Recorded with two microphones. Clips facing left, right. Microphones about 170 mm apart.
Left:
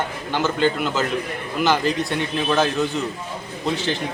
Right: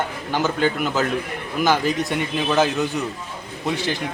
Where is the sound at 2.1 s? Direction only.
5° right (ahead or behind).